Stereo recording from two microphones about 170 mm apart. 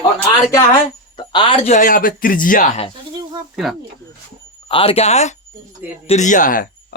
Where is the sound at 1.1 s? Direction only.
30° left (ahead or behind); by 2.6 s 55° left (ahead or behind).